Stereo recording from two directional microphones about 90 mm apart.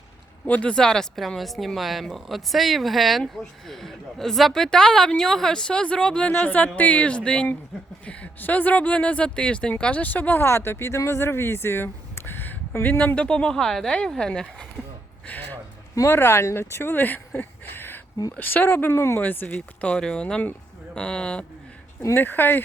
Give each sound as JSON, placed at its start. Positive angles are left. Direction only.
{"t": 0.4, "sound": "a woman's voice", "side_deg": 15}
{"t": 13.1, "sound": "a woman's voice", "side_deg": 10}
{"t": 16.0, "sound": "a woman's voice", "side_deg": 30}
{"t": 22.1, "sound": "speech", "side_deg": 20}